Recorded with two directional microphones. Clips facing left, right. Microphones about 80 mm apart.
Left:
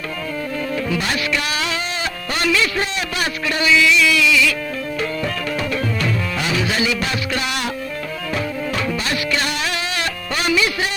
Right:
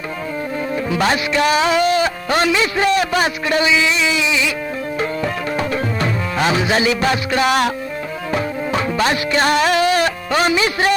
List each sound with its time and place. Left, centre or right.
1.0 s music: right
1.8 s music: right
2.4 s speech: right
5.5 s music: right
9.0 s music: right